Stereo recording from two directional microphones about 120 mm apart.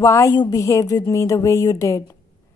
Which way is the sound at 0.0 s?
25° left (ahead or behind).